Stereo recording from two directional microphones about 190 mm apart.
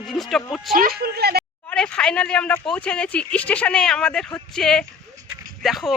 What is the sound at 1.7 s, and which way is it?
Speech, 5° left (ahead or behind).